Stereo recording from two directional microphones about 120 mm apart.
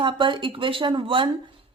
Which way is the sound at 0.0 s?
40° right (ahead or behind).